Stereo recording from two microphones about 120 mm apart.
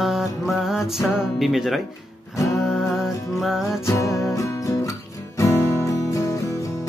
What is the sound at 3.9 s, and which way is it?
Music, 25° left (ahead or behind).